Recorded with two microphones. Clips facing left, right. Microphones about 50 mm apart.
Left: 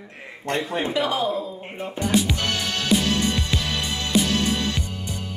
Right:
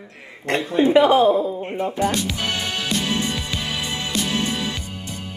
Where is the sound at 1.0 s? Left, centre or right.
Right.